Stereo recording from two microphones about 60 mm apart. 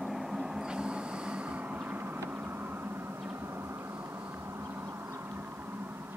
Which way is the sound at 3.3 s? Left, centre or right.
Right.